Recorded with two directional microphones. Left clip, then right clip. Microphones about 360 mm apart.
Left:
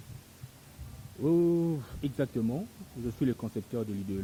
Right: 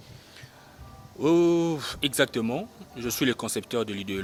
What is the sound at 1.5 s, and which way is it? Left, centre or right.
Speech, centre.